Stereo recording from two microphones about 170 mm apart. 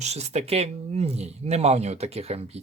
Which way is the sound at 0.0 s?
40° right (ahead or behind).